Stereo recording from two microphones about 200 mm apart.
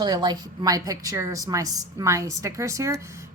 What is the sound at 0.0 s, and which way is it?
A woman's voice, 20° right (ahead or behind).